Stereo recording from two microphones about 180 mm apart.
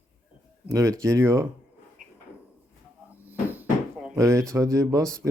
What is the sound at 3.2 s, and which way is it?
Cupboard open or close, 10° right (ahead or behind).